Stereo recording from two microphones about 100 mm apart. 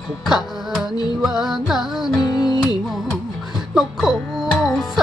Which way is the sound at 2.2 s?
45° left (ahead or behind).